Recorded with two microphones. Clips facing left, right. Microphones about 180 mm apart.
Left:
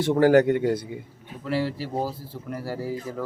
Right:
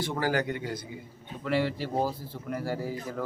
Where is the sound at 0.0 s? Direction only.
60° left (ahead or behind).